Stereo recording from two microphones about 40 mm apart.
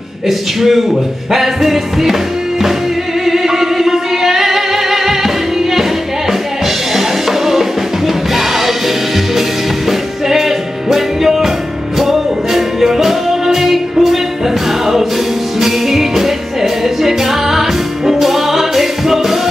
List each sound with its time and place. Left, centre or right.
0.3 s music: centre
3.3 s music: centre
6.9 s music: centre
15.6 s music: centre